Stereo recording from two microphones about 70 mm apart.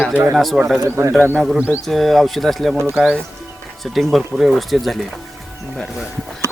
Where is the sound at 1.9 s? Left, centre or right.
Centre.